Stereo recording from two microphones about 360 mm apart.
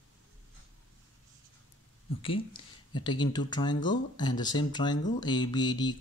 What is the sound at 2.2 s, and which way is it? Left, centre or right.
Speech, centre.